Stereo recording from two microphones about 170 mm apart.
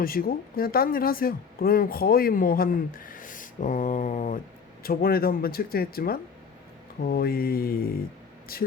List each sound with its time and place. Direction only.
0.0 s speech: 60° left (ahead or behind)
4.8 s speech: 60° left (ahead or behind)